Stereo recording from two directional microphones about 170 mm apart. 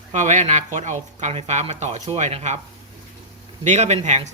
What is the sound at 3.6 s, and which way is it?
Speech, 45° right (ahead or behind).